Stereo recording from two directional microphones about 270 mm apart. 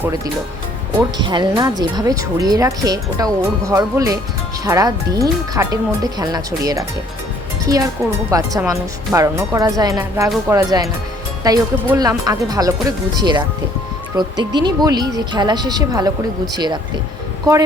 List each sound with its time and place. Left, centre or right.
0.9 s speech: centre